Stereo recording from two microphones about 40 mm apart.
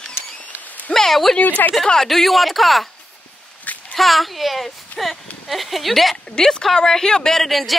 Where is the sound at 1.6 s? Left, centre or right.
Left.